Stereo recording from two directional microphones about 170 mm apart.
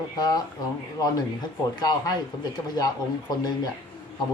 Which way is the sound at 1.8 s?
25° left (ahead or behind).